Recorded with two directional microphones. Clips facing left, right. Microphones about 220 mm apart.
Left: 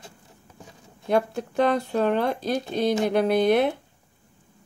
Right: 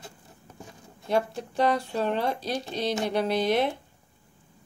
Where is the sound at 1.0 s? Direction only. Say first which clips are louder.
Left 3 dB; 55° left (ahead or behind).